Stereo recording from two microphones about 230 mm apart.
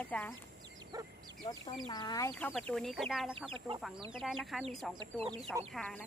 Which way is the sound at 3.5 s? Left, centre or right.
Right.